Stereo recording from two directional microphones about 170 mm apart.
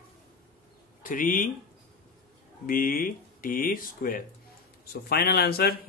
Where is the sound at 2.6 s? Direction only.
55° left (ahead or behind).